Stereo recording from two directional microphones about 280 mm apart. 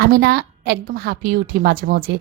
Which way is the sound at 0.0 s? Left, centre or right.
Right.